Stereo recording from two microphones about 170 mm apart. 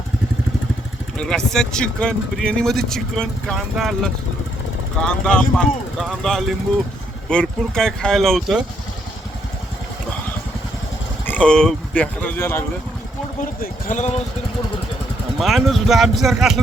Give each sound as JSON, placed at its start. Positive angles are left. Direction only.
{"t": 1.2, "sound": "speech", "side_deg": 5}
{"t": 11.3, "sound": "speech", "side_deg": 5}
{"t": 13.6, "sound": "speech", "side_deg": 50}
{"t": 15.4, "sound": "speech", "side_deg": 0}